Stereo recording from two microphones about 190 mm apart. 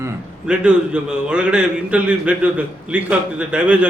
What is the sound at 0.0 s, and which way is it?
A man's voice, 5° right (ahead or behind).